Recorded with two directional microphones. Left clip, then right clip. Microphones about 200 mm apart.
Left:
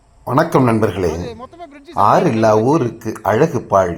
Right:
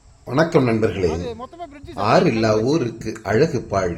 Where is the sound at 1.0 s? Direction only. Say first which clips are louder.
Left 2 dB; centre (ahead or behind).